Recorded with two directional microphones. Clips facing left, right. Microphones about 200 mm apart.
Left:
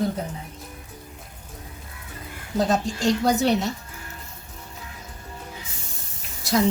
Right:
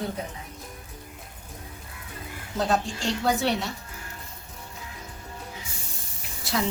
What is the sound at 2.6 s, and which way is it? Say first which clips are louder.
A woman's voice: left 4 dB; 40° left (ahead or behind).